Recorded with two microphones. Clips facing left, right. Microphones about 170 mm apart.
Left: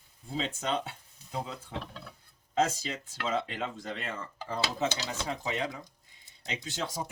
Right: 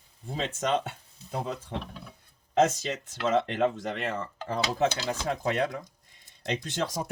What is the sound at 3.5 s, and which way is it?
Cutlery, 65° right (ahead or behind).